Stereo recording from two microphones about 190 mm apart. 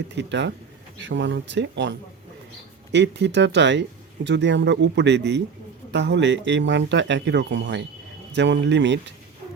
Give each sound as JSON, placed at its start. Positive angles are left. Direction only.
{"t": 0.2, "sound": "speech", "side_deg": -70}